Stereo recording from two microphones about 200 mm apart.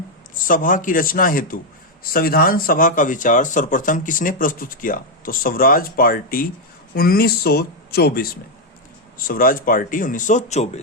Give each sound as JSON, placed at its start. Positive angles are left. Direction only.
{"t": 0.4, "sound": "speech", "side_deg": 40}